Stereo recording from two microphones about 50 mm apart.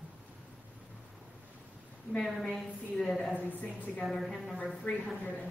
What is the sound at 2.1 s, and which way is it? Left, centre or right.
A woman's voice, centre.